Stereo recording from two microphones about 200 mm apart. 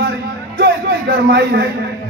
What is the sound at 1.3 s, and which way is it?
Speech, 55° right (ahead or behind).